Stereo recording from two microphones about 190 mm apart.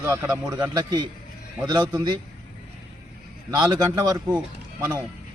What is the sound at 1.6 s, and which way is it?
Speech, 20° right (ahead or behind).